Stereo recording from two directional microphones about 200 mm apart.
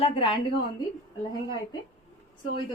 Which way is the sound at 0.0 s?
25° left (ahead or behind).